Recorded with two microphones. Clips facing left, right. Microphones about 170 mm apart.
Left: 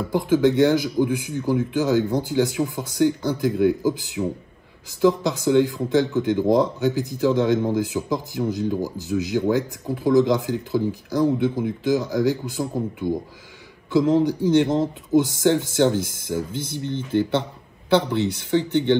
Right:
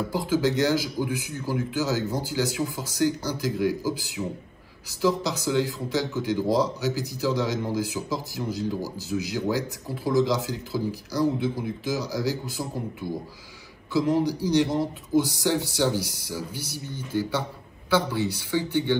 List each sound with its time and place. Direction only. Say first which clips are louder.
0.3 s speech: left 6 dB; 20° left (ahead or behind)
5.4 s a man's voice: left 7 dB; 20° left (ahead or behind)
18.2 s speech: left 5 dB; 10° right (ahead or behind)